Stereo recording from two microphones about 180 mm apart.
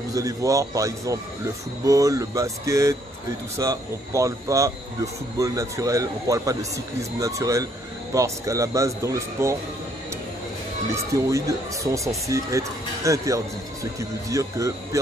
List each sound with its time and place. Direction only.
0.1 s speech: 20° right (ahead or behind)
11.2 s speech: 15° right (ahead or behind)